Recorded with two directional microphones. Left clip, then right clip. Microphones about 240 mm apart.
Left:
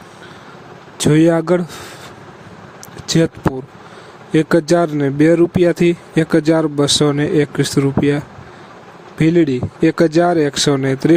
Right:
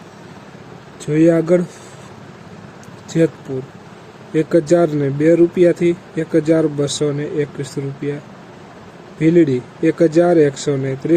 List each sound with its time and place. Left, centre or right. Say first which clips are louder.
0.9 s speech: left 1 dB; left
4.3 s speech: left 1 dB; left